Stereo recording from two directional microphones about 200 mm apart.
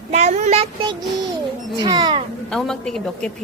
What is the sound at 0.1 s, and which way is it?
Child singing, 35° right (ahead or behind).